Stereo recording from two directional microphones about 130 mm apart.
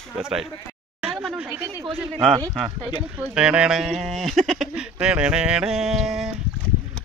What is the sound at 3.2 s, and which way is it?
Speech, 5° right (ahead or behind).